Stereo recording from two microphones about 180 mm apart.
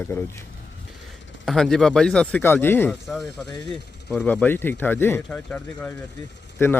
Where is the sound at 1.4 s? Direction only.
Centre (ahead or behind).